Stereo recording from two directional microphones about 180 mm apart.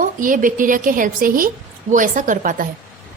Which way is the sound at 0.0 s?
50° right (ahead or behind).